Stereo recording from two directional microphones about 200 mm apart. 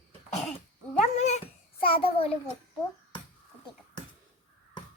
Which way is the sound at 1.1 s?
35° left (ahead or behind).